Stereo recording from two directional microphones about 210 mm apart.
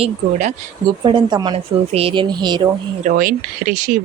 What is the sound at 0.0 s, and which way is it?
Speech, 35° right (ahead or behind).